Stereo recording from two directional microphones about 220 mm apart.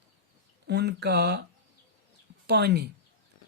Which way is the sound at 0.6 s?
50° right (ahead or behind).